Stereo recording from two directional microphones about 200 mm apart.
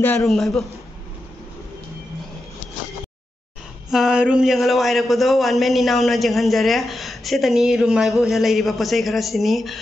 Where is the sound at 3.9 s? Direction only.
5° right (ahead or behind).